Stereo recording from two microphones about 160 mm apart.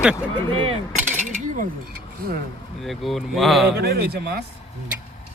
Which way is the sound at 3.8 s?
90° right.